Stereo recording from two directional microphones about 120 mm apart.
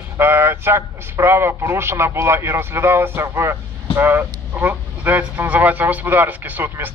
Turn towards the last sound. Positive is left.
turn(degrees=-15)  # may be behind; listen again after turning